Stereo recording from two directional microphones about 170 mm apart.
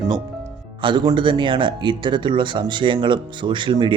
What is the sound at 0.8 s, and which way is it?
Speech, 25° right (ahead or behind).